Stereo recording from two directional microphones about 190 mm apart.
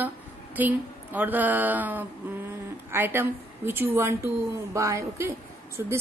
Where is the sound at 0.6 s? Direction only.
10° right (ahead or behind).